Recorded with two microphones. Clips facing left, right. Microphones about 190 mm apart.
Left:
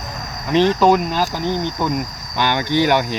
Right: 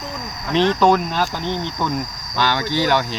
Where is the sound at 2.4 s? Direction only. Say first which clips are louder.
Left 2 dB; 15° left (ahead or behind).